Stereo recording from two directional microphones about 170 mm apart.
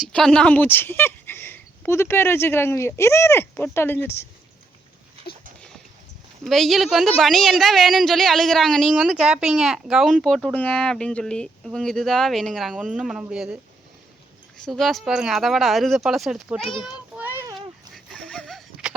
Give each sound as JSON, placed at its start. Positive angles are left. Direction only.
{"t": 0.0, "sound": "speech", "side_deg": 5}
{"t": 6.4, "sound": "speech", "side_deg": 0}
{"t": 14.6, "sound": "speech", "side_deg": 0}
{"t": 16.8, "sound": "child singing", "side_deg": -5}
{"t": 17.9, "sound": "a sound", "side_deg": 5}